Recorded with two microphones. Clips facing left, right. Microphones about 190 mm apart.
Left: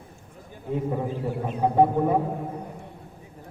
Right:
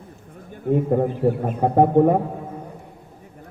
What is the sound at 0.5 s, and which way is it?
A man's voice, 55° right (ahead or behind).